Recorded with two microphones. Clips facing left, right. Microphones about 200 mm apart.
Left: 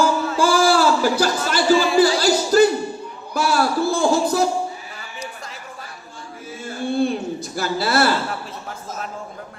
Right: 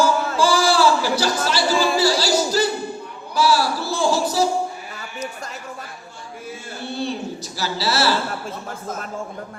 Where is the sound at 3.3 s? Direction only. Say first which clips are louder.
Right 3 dB; 50° left (ahead or behind).